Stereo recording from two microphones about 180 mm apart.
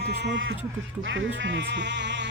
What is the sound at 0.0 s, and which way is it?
Music, 65° right (ahead or behind).